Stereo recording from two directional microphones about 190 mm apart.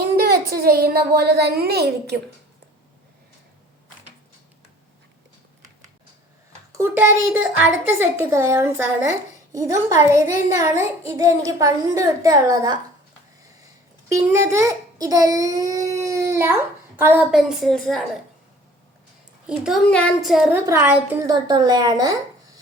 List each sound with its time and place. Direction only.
0.6 s a woman's voice: 55° right (ahead or behind)
6.7 s a woman's voice: 10° right (ahead or behind)
14.1 s a woman's voice: 15° right (ahead or behind); by 18.0 s centre (ahead or behind)
19.5 s a woman's voice: centre (ahead or behind)
20.7 s a woman's voice: 15° right (ahead or behind)